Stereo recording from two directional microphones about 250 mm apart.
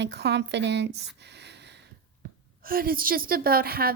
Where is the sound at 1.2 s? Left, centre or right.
Right.